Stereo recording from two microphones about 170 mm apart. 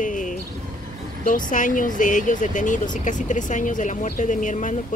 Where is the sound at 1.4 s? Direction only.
50° left (ahead or behind).